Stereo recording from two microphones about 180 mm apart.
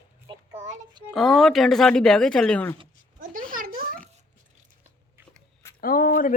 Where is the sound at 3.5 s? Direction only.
50° right (ahead or behind).